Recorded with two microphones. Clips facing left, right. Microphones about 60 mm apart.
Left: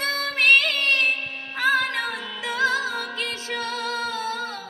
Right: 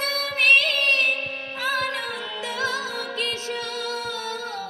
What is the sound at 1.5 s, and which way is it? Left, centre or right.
Music, left.